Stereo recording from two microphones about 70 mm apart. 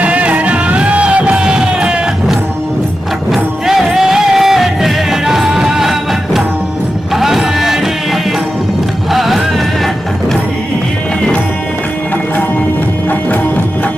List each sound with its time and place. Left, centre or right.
0.0 s music: centre
3.3 s music: centre